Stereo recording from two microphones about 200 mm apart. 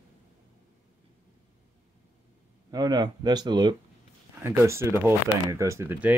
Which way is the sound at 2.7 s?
20° right (ahead or behind).